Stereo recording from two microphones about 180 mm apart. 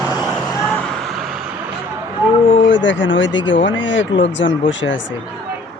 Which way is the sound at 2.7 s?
90° left.